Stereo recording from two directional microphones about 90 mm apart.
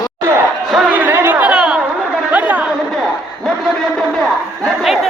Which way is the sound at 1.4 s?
10° right (ahead or behind).